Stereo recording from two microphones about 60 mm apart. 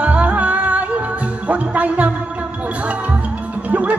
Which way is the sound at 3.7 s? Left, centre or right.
Right.